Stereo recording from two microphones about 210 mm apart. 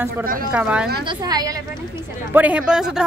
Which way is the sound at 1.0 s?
20° right (ahead or behind).